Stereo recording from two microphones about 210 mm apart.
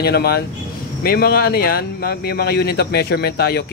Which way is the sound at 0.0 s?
50° left (ahead or behind).